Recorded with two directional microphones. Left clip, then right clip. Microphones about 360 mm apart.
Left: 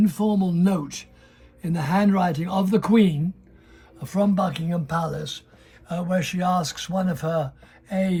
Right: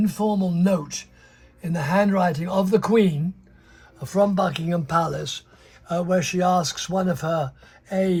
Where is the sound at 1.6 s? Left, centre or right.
Centre.